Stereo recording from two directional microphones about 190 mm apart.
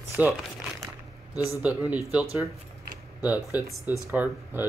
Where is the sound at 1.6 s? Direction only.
5° right (ahead or behind).